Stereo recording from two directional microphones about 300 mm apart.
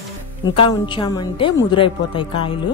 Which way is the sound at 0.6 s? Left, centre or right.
Centre.